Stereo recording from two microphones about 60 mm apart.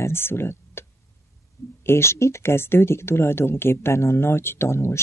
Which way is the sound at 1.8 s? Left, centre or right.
Left.